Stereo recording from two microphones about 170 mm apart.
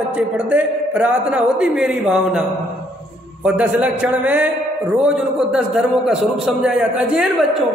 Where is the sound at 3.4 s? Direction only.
5° right (ahead or behind).